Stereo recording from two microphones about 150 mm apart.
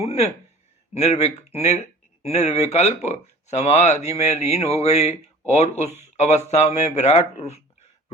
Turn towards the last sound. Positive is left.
turn(degrees=45)  # may be behind; listen again after turning